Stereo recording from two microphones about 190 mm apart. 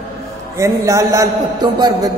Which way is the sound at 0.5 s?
15° right (ahead or behind).